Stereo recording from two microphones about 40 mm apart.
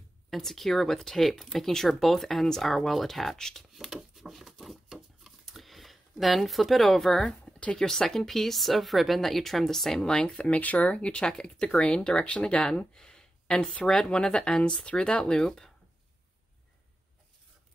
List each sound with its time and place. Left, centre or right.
0.3 s speech: centre
3.7 s a sound: centre
7.7 s speech: centre
10.0 s speech: left
11.0 s speech: left
12.9 s a sound: centre
13.8 s speech: centre